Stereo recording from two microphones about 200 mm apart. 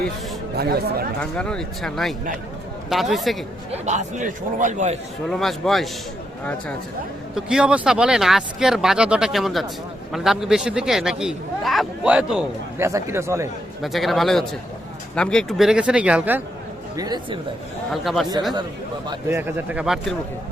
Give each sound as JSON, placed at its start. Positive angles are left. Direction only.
{"t": 0.5, "sound": "speech", "side_deg": -50}
{"t": 1.2, "sound": "speech", "side_deg": 5}
{"t": 3.7, "sound": "a man's voice", "side_deg": -35}
{"t": 5.3, "sound": "speech", "side_deg": 0}
{"t": 7.3, "sound": "speech", "side_deg": -5}
{"t": 13.8, "sound": "speech", "side_deg": 0}
{"t": 17.0, "sound": "speech", "side_deg": -20}
{"t": 17.9, "sound": "speech", "side_deg": 0}
{"t": 19.0, "sound": "speech", "side_deg": -20}
{"t": 19.4, "sound": "speech", "side_deg": -10}